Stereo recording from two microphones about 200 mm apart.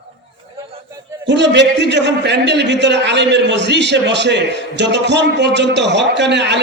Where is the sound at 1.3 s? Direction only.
60° right (ahead or behind).